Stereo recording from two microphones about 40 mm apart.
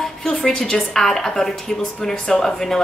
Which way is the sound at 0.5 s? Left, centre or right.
Centre.